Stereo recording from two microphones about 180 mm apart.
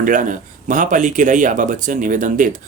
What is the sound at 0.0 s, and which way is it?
Speech, 45° right (ahead or behind).